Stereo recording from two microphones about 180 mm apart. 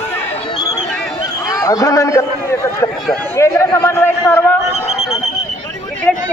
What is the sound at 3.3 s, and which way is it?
Speech, 15° left (ahead or behind).